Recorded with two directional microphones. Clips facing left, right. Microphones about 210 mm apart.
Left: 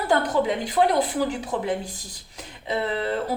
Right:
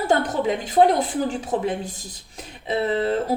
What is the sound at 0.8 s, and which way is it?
Speech, 30° right (ahead or behind).